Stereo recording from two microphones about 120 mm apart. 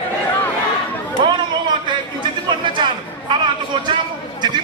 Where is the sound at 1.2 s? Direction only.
40° right (ahead or behind).